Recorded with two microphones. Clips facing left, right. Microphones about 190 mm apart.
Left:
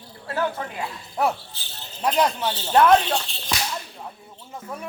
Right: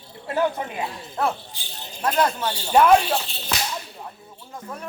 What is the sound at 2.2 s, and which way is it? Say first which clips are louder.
Speech: even; 15° left (ahead or behind).